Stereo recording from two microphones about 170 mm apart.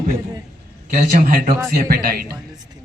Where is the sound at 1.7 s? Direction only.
60° right (ahead or behind).